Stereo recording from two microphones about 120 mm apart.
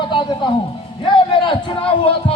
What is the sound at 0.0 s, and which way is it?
Music, 40° left (ahead or behind).